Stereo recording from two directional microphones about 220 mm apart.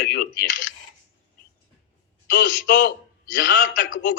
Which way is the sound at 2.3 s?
55° left (ahead or behind).